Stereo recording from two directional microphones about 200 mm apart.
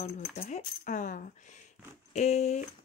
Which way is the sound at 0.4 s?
40° left (ahead or behind).